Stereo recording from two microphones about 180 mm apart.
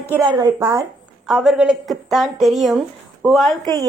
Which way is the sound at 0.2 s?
25° right (ahead or behind).